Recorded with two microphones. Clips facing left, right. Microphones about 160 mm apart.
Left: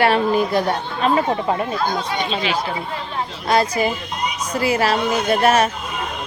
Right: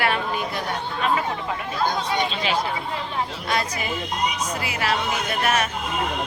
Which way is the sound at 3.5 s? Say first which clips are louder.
Left 10 dB; 35° left (ahead or behind).